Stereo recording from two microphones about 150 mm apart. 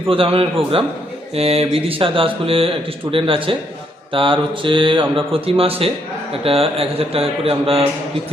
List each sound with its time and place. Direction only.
0.1 s speech: 40° right (ahead or behind)